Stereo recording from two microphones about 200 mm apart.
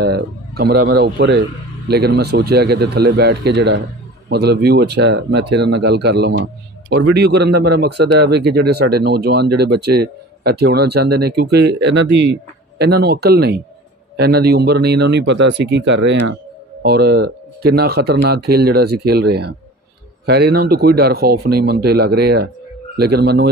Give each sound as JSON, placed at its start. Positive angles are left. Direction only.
{"t": 0.0, "sound": "speech", "side_deg": -50}
{"t": 16.8, "sound": "speech", "side_deg": -55}